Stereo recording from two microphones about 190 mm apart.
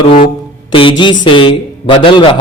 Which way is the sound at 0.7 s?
25° left (ahead or behind).